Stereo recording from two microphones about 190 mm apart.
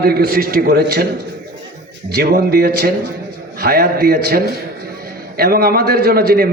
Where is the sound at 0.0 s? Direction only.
55° right (ahead or behind).